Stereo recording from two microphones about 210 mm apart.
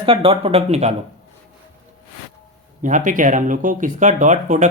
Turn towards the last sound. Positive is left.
turn(degrees=-35)  # may be behind; listen again after turning